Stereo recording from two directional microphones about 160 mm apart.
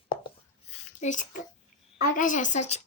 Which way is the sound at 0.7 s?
45° left (ahead or behind).